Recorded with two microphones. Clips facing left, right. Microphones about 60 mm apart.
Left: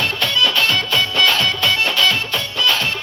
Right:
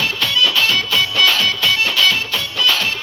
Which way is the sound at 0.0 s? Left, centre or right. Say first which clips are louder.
Even; left.